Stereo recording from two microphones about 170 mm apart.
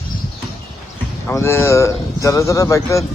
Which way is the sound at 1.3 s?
15° left (ahead or behind).